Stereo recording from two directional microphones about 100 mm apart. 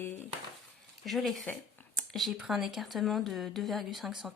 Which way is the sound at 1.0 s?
Centre (ahead or behind).